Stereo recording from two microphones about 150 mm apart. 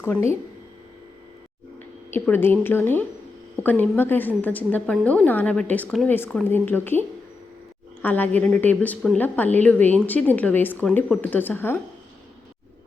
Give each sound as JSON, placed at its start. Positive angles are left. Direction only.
{"t": 0.0, "sound": "a woman's voice", "side_deg": 15}
{"t": 2.1, "sound": "a woman's voice", "side_deg": 15}
{"t": 8.0, "sound": "a woman's voice", "side_deg": 10}